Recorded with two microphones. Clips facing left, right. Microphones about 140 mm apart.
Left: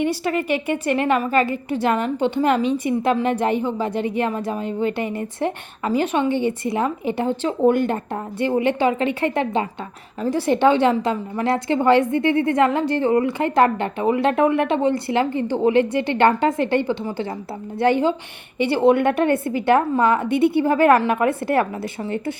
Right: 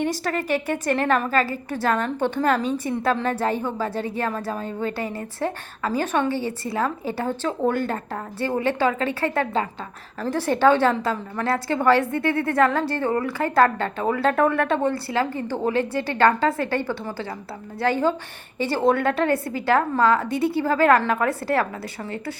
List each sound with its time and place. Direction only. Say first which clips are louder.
0.9 s a woman's voice: left 2 dB; 15° left (ahead or behind)
20.2 s a woman's voice: left 5 dB; 35° right (ahead or behind)
20.5 s a woman's voice: left 1 dB; 20° left (ahead or behind)